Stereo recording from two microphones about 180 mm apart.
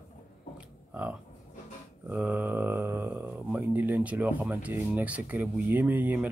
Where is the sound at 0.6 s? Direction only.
5° right (ahead or behind).